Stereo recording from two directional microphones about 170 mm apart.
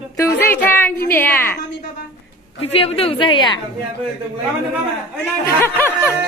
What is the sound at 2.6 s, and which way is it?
A woman's voice, 35° left (ahead or behind).